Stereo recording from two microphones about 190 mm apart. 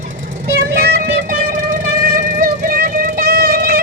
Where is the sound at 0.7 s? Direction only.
55° right (ahead or behind).